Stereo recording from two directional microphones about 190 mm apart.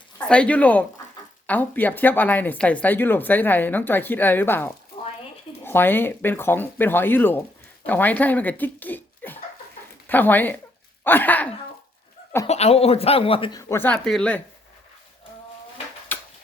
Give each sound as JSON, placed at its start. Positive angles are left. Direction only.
{"t": 0.2, "sound": "speech", "side_deg": 5}
{"t": 12.5, "sound": "speech", "side_deg": 35}
{"t": 13.6, "sound": "speech", "side_deg": 15}
{"t": 16.1, "sound": "tick-tock", "side_deg": 10}